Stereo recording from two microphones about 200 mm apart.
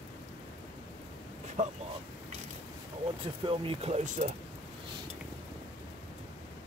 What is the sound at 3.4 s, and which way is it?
Speech, 30° right (ahead or behind).